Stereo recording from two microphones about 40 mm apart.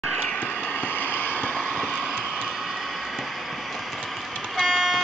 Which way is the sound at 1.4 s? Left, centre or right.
Left.